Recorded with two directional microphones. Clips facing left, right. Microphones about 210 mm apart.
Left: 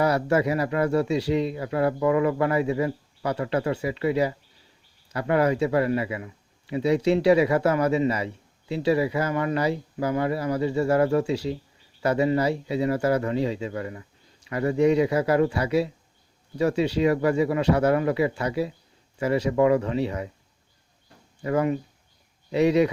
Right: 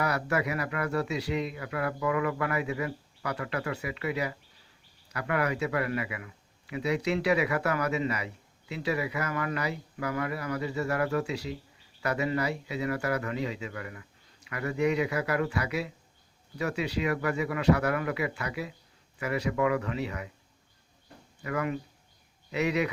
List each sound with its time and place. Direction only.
0.0 s speech: 25° left (ahead or behind)
21.4 s speech: 30° left (ahead or behind)